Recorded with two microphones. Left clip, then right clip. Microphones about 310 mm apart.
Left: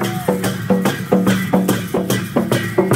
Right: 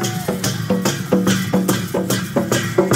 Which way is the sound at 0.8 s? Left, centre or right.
Centre.